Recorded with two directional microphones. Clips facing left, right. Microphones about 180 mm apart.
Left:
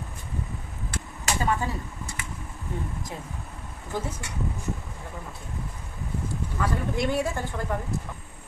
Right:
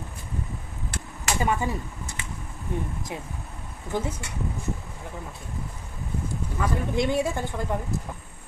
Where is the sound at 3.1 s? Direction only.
20° right (ahead or behind).